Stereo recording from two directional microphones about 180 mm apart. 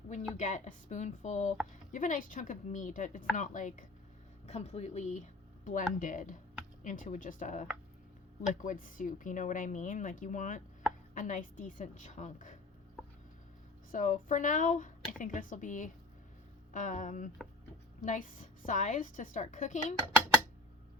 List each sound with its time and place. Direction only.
0.1 s a woman's voice: 40° left (ahead or behind)
13.9 s speech: 45° left (ahead or behind)